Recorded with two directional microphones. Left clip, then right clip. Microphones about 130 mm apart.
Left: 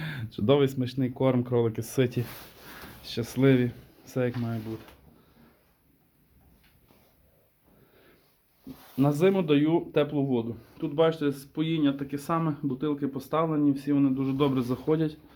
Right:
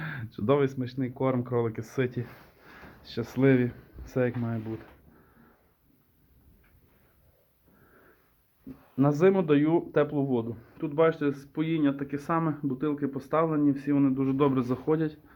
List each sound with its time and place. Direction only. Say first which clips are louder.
0.0 s speech: left 2 dB; 25° left (ahead or behind); by 2.2 s 40° left (ahead or behind)
3.0 s speech: even; 20° left (ahead or behind); by 4.7 s 10° right (ahead or behind)
9.0 s speech: right 1 dB; 5° right (ahead or behind)
14.8 s a man's voice: left 1 dB; 15° left (ahead or behind)